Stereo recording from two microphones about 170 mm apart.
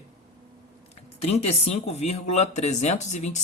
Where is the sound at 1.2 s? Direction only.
35° left (ahead or behind).